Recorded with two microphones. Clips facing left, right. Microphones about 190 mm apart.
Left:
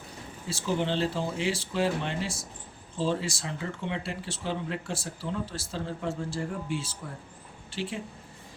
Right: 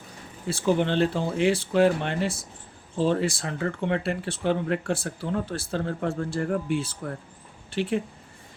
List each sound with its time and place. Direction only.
0.4 s speech: 60° right (ahead or behind)